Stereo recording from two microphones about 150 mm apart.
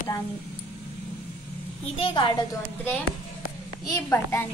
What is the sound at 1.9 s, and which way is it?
Speech, 35° left (ahead or behind).